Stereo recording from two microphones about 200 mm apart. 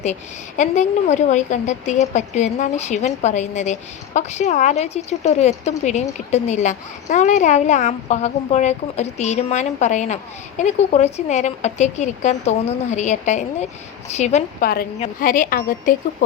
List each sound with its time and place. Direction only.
0.0 s a woman's voice: 35° left (ahead or behind)
14.6 s a woman's voice: 50° left (ahead or behind)